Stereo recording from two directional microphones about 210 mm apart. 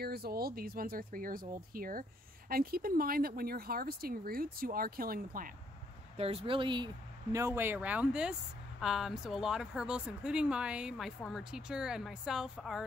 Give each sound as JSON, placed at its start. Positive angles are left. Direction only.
{"t": 0.0, "sound": "speech", "side_deg": -50}
{"t": 6.1, "sound": "speech", "side_deg": -30}
{"t": 7.3, "sound": "speech", "side_deg": -10}